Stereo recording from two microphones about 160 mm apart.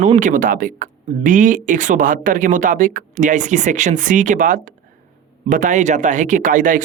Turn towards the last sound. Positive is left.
turn(degrees=-55)  # may be behind; listen again after turning